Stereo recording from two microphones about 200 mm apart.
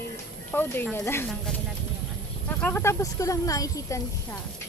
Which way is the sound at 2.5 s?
10° left (ahead or behind).